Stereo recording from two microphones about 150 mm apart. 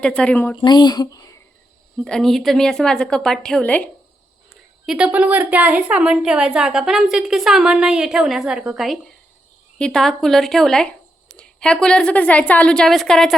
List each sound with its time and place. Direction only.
0.0 s a woman's voice: 5° left (ahead or behind)
0.5 s speech: 30° left (ahead or behind)
2.0 s a woman's voice: 5° left (ahead or behind)
4.9 s a woman's voice: 5° right (ahead or behind)